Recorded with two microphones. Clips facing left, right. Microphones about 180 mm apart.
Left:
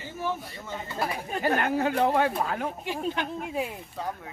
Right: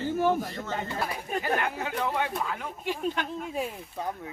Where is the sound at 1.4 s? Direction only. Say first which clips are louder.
Left 6 dB; 45° left (ahead or behind).